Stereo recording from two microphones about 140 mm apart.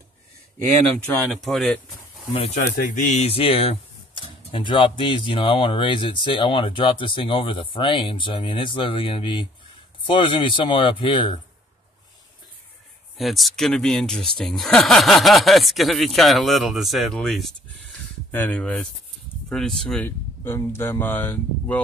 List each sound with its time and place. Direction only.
1.4 s speech: centre (ahead or behind)
2.3 s speech: 45° left (ahead or behind)
2.6 s speech: 70° left (ahead or behind)
3.3 s speech: 45° left (ahead or behind)
13.2 s speech: centre (ahead or behind)
20.1 s speech: 15° left (ahead or behind)